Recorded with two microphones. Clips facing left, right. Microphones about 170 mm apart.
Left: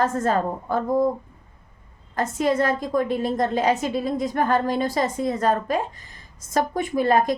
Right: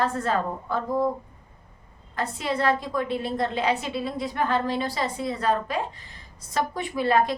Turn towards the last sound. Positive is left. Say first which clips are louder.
# left 3 dB
turn(degrees=45)  # may be behind; listen again after turning